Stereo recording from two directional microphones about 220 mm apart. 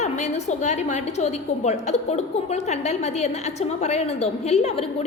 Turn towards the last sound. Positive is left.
turn(degrees=30)  # may be behind; listen again after turning